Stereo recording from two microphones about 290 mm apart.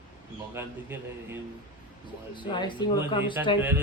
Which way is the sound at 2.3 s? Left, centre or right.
Centre.